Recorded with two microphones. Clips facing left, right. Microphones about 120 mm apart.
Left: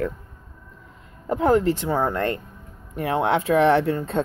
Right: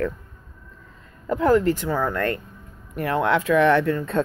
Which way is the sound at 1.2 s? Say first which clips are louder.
Even; 25° left (ahead or behind).